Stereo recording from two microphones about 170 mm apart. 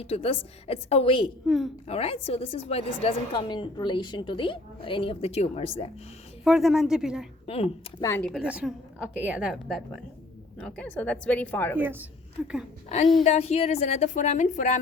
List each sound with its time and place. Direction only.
0.0 s a woman's voice: 35° left (ahead or behind)
1.5 s a woman's voice: centre (ahead or behind)
1.9 s a woman's voice: 35° left (ahead or behind)
6.4 s a woman's voice: centre (ahead or behind)
7.4 s speech: 35° left (ahead or behind)
8.0 s a woman's voice: 15° left (ahead or behind)
8.3 s a woman's voice: 5° right (ahead or behind); by 11.8 s 10° left (ahead or behind)
11.8 s a woman's voice: 10° right (ahead or behind)
13.2 s a woman's voice: 40° left (ahead or behind)